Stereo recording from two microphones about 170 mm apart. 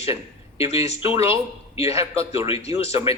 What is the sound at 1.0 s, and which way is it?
Speech, 15° right (ahead or behind).